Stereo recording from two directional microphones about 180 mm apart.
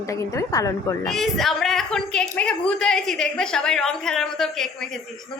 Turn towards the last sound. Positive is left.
turn(degrees=0)  # may be behind; listen again after turning